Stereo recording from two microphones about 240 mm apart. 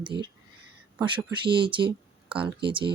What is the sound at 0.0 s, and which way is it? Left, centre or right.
Speech, centre.